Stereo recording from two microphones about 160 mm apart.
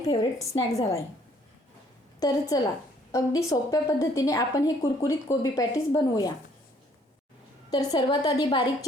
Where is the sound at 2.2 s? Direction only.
25° left (ahead or behind).